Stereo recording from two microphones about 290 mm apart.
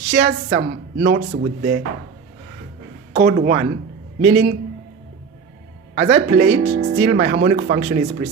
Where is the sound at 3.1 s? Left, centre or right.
Right.